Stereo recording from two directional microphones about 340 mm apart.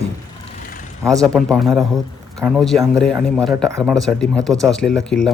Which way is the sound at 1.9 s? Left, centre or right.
Centre.